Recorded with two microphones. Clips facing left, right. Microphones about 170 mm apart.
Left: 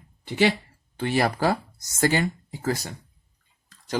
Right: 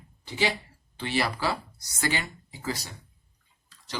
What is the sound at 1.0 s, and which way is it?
Speech, 50° left (ahead or behind).